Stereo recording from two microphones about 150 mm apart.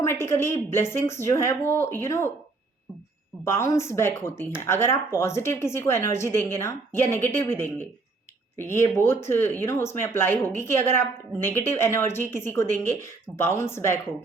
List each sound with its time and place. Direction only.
0.0 s a woman's voice: 15° left (ahead or behind)
3.4 s a woman's voice: 15° left (ahead or behind)